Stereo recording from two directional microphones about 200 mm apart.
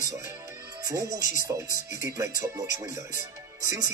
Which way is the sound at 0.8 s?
15° right (ahead or behind).